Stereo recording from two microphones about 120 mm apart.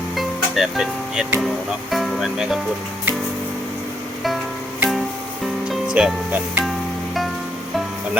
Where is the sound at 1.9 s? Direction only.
Centre (ahead or behind).